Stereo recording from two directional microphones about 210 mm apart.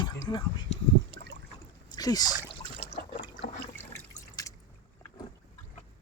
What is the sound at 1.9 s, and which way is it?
Speech, 20° left (ahead or behind).